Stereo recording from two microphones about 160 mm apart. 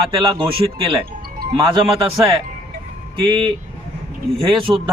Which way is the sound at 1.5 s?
30° right (ahead or behind).